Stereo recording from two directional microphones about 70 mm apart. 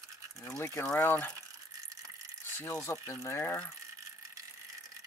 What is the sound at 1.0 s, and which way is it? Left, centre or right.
Speech, left.